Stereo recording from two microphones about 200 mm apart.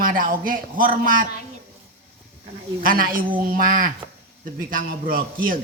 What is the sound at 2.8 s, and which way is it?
A man's voice, 45° right (ahead or behind).